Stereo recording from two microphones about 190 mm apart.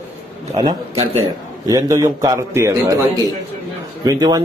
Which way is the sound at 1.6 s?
20° right (ahead or behind).